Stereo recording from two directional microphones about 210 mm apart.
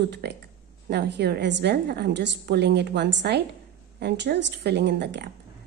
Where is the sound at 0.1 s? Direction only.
55° right (ahead or behind).